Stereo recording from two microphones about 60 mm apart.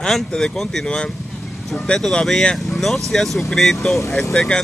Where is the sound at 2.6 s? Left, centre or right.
Centre.